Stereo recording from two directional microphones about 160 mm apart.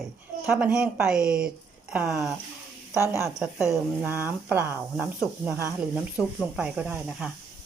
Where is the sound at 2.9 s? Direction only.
15° right (ahead or behind).